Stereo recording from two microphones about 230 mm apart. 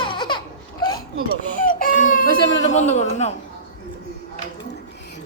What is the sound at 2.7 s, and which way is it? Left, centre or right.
Speech, left.